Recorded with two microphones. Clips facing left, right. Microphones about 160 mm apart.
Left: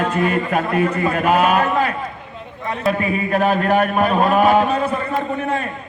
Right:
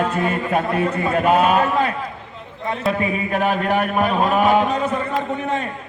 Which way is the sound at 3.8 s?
Centre (ahead or behind).